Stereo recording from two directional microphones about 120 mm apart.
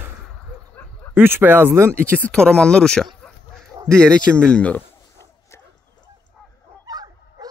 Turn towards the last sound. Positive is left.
turn(degrees=-35)  # may be behind; listen again after turning